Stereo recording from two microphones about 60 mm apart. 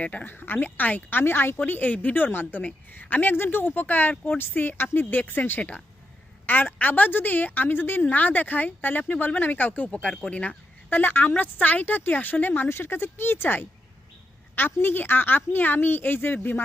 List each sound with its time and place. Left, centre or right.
0.0 s speech: left
1.6 s speech: left
4.1 s speech: left
4.4 s speech: left; by 10.5 s centre
10.8 s speech: left